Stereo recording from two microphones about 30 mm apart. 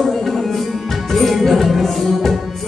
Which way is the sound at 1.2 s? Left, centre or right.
Centre.